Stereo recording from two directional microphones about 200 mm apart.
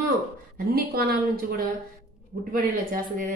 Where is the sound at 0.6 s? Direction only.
50° right (ahead or behind).